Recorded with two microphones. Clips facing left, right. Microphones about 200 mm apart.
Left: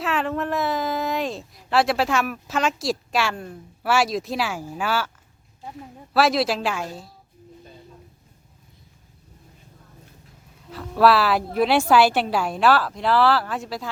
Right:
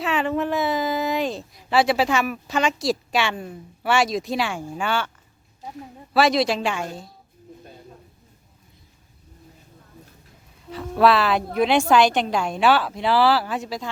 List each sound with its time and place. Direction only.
0.0 s a woman's voice: centre (ahead or behind)
10.7 s a woman's voice: centre (ahead or behind)